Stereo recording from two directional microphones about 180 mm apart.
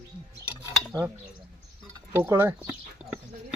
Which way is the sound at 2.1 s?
10° right (ahead or behind).